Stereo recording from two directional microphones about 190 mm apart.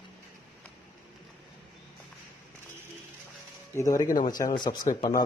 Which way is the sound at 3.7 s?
15° left (ahead or behind).